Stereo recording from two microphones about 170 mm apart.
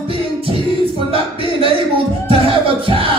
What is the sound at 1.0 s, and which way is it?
Speech, 30° right (ahead or behind).